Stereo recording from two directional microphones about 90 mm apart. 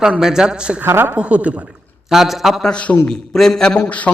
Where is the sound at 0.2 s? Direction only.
5° right (ahead or behind).